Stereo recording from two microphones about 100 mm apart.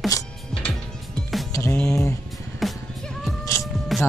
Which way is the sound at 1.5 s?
25° left (ahead or behind).